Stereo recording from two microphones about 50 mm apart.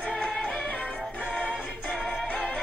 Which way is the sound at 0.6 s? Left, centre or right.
Left.